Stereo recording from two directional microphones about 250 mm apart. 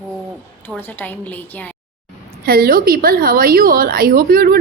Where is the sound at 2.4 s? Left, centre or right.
Right.